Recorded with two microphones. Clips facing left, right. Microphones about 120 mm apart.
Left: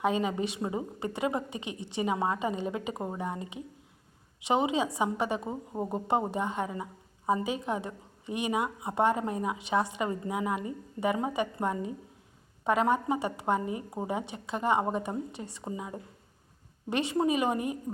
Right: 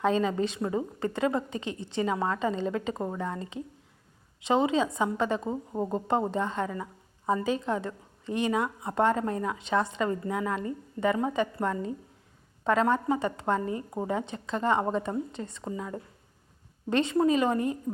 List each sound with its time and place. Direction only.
0.0 s a woman's voice: 15° left (ahead or behind)